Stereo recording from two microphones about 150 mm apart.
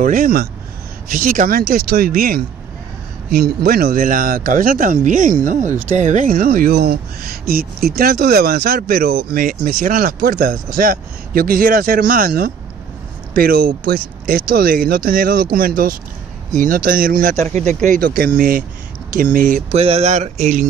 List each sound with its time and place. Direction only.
0.0 s speech: 65° right (ahead or behind)
1.0 s speech: 70° right (ahead or behind)
3.3 s speech: 85° right; by 17.4 s 70° right (ahead or behind)
17.4 s speech: 50° right (ahead or behind)
17.8 s speech: 65° right (ahead or behind)
19.7 s speech: 45° right (ahead or behind)